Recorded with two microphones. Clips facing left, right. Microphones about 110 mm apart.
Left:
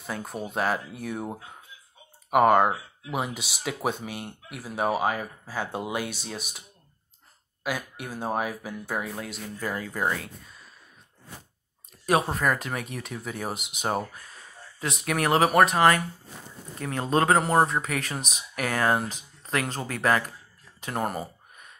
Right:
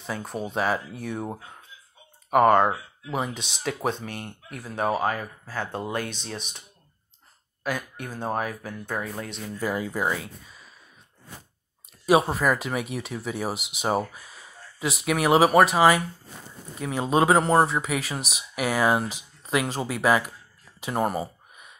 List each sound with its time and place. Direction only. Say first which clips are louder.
0.0 s speech: right 2 dB; centre (ahead or behind)
7.6 s speech: right 1 dB; 10° left (ahead or behind)
9.6 s speech: right 3 dB; 10° right (ahead or behind)
12.1 s speech: right 3 dB; 5° right (ahead or behind)
20.8 s a sound: right 4 dB; 5° right (ahead or behind)